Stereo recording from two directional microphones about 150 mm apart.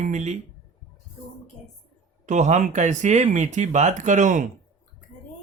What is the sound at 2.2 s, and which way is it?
Speech, 55° right (ahead or behind).